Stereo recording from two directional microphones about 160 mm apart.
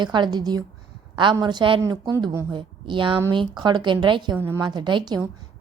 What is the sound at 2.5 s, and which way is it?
A woman's voice, 30° right (ahead or behind).